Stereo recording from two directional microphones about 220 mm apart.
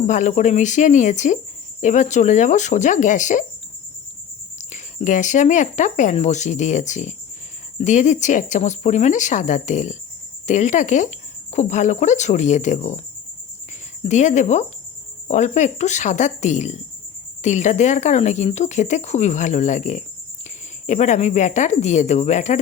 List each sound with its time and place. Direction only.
0.1 s speech: 35° left (ahead or behind)
4.5 s speech: 35° left (ahead or behind)
14.0 s speech: 30° left (ahead or behind)